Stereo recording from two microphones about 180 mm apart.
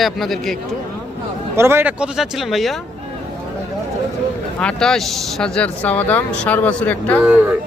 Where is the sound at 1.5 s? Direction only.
15° right (ahead or behind).